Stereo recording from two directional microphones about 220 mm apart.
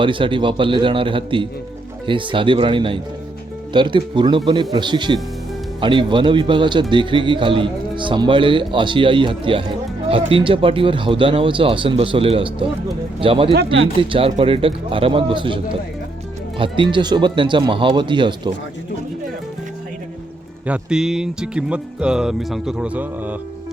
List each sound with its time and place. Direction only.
0.0 s speech: 20° right (ahead or behind)
20.7 s speech: 5° right (ahead or behind)